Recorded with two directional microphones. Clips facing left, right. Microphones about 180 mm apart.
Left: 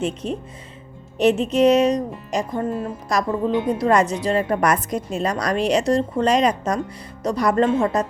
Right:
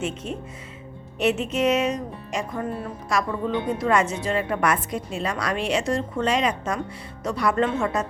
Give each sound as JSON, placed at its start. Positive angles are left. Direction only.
{"t": 0.0, "sound": "speech", "side_deg": 35}